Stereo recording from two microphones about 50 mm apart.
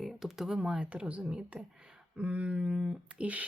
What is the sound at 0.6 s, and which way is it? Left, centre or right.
Speech, centre.